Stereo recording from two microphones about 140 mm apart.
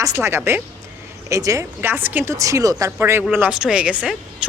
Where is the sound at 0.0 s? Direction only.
20° right (ahead or behind).